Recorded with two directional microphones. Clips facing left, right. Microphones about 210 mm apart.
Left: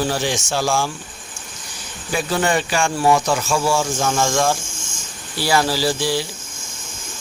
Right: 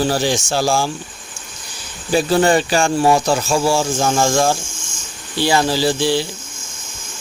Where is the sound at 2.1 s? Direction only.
30° right (ahead or behind).